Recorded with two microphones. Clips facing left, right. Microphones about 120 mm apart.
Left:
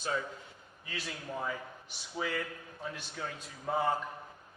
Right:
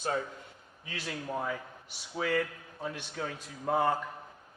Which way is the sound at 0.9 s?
65° right (ahead or behind).